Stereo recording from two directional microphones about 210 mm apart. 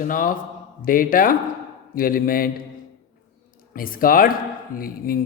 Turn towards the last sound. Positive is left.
turn(degrees=45)  # may be behind; listen again after turning